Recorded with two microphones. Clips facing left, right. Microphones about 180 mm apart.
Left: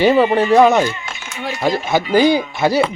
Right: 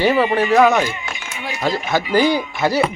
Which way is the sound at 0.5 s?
20° left (ahead or behind).